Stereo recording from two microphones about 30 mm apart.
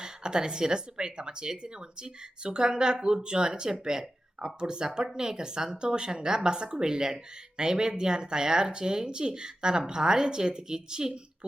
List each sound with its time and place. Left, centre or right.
0.0 s speech: right